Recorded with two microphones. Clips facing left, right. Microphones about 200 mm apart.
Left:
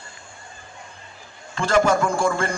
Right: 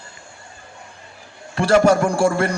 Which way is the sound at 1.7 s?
40° right (ahead or behind).